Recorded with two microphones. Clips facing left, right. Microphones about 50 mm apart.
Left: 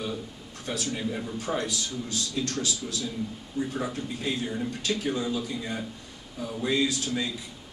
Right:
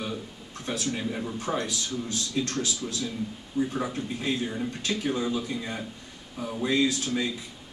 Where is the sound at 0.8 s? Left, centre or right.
Centre.